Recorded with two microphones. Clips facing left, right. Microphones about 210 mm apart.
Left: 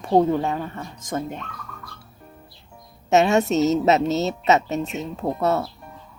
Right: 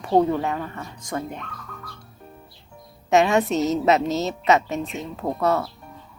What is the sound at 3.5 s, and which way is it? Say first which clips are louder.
Music: left 2 dB; centre (ahead or behind).